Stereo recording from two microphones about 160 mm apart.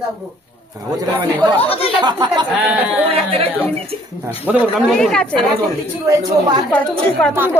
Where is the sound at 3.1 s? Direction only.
35° right (ahead or behind).